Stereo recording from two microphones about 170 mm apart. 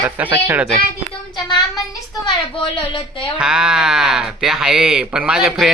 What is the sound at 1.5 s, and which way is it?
Speech, 20° left (ahead or behind).